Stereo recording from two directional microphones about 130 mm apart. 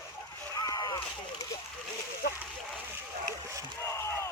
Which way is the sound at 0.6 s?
30° left (ahead or behind).